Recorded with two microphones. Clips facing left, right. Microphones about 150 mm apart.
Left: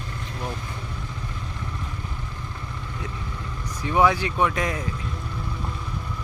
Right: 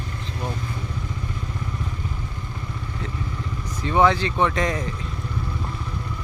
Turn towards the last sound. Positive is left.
turn(degrees=5)  # may be behind; listen again after turning